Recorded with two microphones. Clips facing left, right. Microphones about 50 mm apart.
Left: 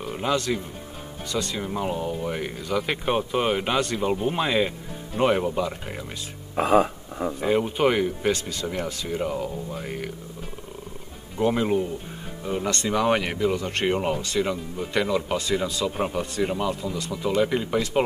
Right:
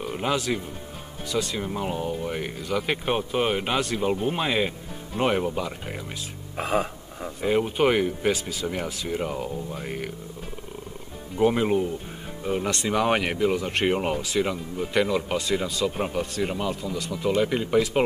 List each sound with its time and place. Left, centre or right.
0.0 s speech: centre
7.3 s speech: centre
11.3 s speech: centre